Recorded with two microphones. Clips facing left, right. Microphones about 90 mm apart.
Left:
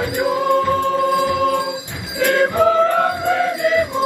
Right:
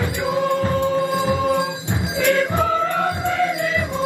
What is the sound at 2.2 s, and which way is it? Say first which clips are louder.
Music: left 2 dB; 40° left (ahead or behind).